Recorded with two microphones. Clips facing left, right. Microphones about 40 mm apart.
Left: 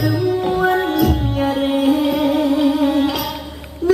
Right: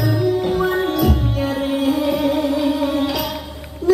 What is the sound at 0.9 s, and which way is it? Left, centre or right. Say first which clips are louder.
Music: left 2 dB; left.